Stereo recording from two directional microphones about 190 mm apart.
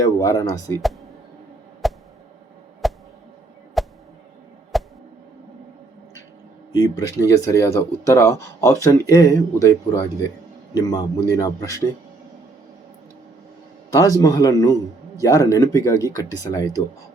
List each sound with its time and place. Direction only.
0.0 s speech: 20° left (ahead or behind)
1.8 s a sound: centre (ahead or behind)
6.7 s speech: 15° left (ahead or behind)
13.9 s speech: 20° left (ahead or behind)